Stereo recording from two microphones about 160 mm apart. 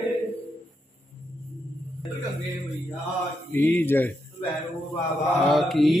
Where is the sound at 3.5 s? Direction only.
15° left (ahead or behind).